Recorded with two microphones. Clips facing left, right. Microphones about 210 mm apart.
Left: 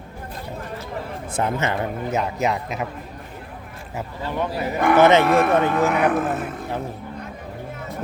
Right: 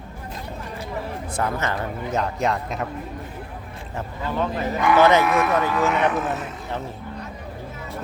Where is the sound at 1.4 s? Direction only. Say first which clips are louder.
Left 3 dB; 20° left (ahead or behind).